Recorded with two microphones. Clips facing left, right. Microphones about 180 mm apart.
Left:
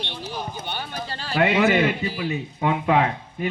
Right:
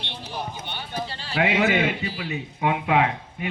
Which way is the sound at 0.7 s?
45° left (ahead or behind).